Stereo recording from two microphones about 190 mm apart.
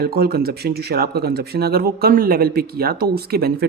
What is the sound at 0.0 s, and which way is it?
Speech, 55° right (ahead or behind).